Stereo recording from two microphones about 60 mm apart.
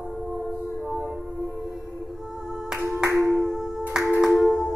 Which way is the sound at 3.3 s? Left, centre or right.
Centre.